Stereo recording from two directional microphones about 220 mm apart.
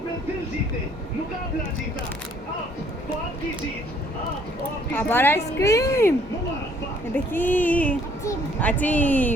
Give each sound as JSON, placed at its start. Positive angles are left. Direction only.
{"t": 4.9, "sound": "speech", "side_deg": 10}